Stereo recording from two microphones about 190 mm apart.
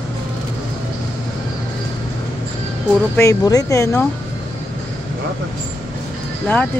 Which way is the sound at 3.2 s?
20° left (ahead or behind).